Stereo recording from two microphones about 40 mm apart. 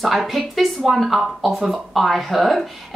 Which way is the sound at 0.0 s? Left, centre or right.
Centre.